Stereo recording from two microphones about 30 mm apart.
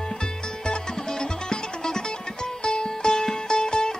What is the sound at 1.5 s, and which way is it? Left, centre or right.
Music, left.